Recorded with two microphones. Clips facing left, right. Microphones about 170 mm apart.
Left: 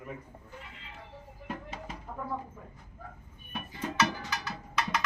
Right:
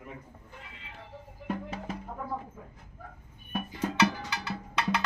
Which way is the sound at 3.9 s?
30° right (ahead or behind).